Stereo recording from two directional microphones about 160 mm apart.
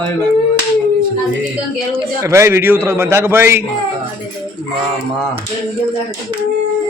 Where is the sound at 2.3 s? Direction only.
15° right (ahead or behind).